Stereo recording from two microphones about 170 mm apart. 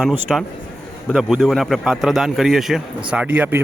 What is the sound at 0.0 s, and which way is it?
Speech, centre (ahead or behind).